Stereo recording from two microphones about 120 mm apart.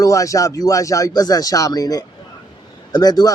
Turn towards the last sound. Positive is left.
turn(degrees=35)  # may be behind; listen again after turning